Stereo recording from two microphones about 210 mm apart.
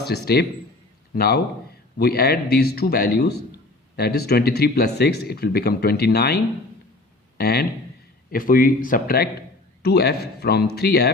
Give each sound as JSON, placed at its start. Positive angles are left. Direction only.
{"t": 0.0, "sound": "a man's voice", "side_deg": 50}